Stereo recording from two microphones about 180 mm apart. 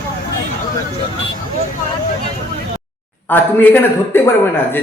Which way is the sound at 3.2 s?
10° left (ahead or behind).